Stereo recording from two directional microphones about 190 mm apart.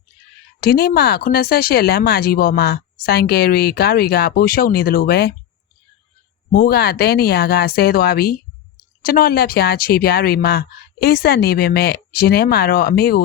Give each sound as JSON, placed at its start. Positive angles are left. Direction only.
{"t": 0.6, "sound": "speech", "side_deg": 55}
{"t": 6.5, "sound": "speech", "side_deg": 50}